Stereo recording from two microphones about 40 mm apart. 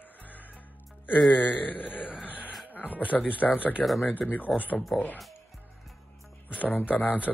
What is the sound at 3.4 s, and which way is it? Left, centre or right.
Speech, left.